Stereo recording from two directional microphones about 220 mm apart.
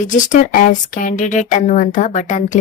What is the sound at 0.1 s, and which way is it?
Speech, 35° left (ahead or behind).